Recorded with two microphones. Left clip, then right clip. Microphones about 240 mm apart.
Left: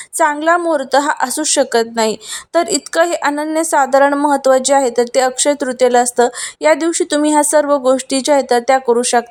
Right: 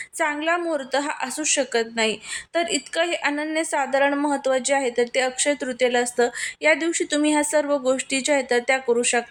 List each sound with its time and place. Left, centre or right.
0.2 s a woman's voice: left